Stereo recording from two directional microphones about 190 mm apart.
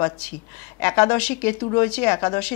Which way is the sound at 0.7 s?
10° left (ahead or behind).